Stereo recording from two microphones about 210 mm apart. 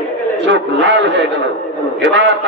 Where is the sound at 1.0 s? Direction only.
60° right (ahead or behind).